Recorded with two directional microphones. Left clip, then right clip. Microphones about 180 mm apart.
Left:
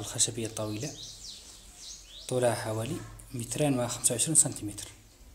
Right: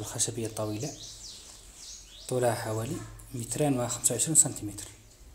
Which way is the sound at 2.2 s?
Centre (ahead or behind).